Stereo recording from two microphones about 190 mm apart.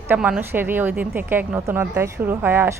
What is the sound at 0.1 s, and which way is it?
A woman's voice, 10° right (ahead or behind).